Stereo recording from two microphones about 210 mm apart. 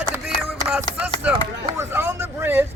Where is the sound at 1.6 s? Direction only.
10° right (ahead or behind).